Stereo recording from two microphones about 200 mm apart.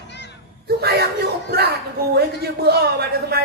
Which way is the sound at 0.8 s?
50° right (ahead or behind).